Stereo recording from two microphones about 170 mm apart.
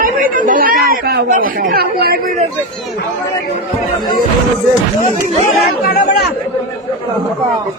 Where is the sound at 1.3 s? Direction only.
55° right (ahead or behind).